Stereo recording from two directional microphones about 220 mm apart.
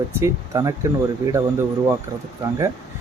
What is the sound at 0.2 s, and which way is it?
Speech, 15° right (ahead or behind).